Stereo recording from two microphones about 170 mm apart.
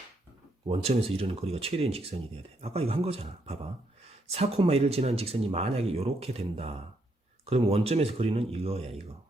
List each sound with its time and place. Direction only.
0.7 s speech: 35° right (ahead or behind)